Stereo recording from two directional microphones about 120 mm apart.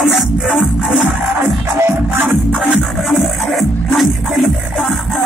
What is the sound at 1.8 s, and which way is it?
Music, 15° right (ahead or behind).